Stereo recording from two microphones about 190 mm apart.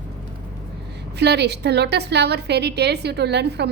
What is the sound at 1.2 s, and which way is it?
A woman's voice, 60° right (ahead or behind).